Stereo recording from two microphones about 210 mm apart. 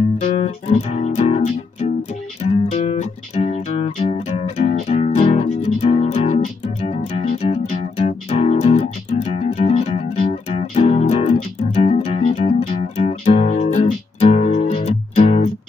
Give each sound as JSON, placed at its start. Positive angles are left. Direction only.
{"t": 0.2, "sound": "music", "side_deg": 30}